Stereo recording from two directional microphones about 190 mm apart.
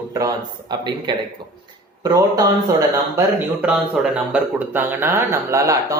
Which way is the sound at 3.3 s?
5° right (ahead or behind).